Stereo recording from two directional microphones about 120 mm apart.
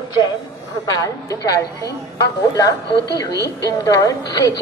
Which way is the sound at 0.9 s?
30° left (ahead or behind).